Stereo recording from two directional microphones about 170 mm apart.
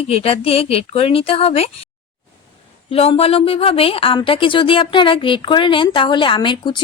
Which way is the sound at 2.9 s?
35° left (ahead or behind).